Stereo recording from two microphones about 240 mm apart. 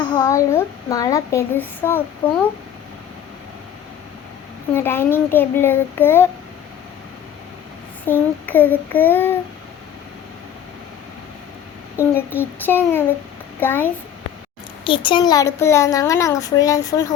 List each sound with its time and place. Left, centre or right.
0.1 s a child's voice: centre
2.2 s speech: left
4.7 s a child's voice: centre
8.0 s a child's voice: centre
12.0 s a child's voice: centre
14.8 s a child's voice: left